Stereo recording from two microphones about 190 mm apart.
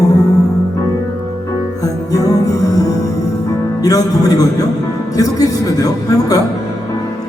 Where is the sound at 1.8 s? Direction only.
20° left (ahead or behind).